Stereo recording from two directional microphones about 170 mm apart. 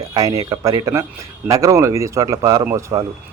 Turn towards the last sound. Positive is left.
turn(degrees=-15)  # may be behind; listen again after turning